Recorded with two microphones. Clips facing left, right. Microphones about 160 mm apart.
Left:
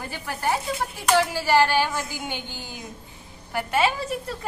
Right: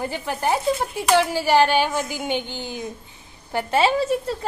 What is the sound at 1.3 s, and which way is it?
A woman's voice, 15° right (ahead or behind).